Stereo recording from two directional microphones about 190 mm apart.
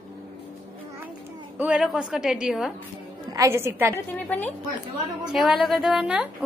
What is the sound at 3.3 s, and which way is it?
Speech, 15° right (ahead or behind).